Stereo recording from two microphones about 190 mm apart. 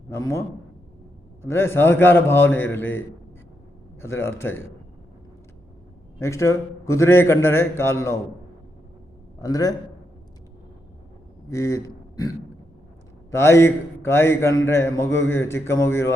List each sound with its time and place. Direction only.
0.1 s a man's voice: 15° left (ahead or behind)
4.0 s a man's voice: 15° left (ahead or behind)
6.1 s a man's voice: 15° left (ahead or behind)
9.4 s a man's voice: 20° left (ahead or behind)
11.4 s speech: 15° left (ahead or behind)
13.3 s a man's voice: 15° left (ahead or behind)